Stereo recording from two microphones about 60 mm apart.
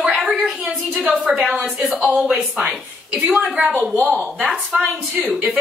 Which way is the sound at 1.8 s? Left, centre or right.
Right.